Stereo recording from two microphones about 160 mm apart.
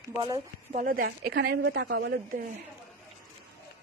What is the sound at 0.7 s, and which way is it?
A woman's voice, 65° right (ahead or behind).